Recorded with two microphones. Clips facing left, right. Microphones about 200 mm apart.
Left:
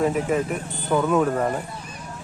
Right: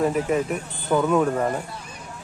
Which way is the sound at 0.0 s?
Centre (ahead or behind).